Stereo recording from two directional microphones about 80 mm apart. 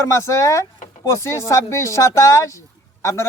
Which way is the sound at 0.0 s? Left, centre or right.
Left.